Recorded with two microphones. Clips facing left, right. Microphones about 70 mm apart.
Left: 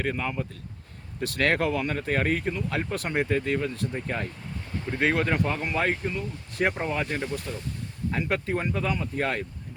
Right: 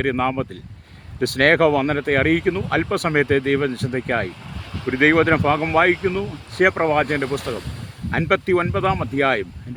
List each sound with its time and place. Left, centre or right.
0.0 s speech: right
4.7 s speech: right